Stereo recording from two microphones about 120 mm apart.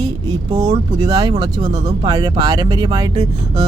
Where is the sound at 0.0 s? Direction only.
40° right (ahead or behind).